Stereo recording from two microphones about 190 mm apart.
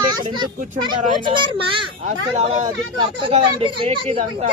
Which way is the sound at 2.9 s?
25° right (ahead or behind).